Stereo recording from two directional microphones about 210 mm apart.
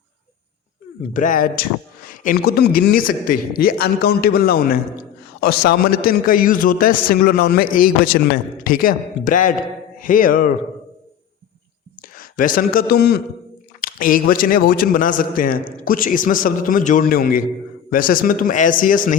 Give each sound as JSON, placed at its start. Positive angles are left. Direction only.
{"t": 1.1, "sound": "a man's voice", "side_deg": 40}
{"t": 12.0, "sound": "a man's voice", "side_deg": 40}